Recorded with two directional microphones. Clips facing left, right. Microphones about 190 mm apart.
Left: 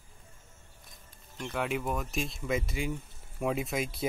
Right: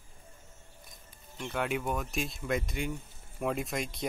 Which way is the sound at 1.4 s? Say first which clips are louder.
Even; centre (ahead or behind).